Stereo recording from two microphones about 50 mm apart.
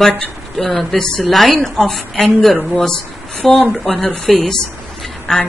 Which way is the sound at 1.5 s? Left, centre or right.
Centre.